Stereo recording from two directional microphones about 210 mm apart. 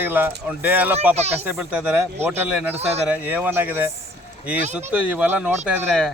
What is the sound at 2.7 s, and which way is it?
Speech, 30° right (ahead or behind).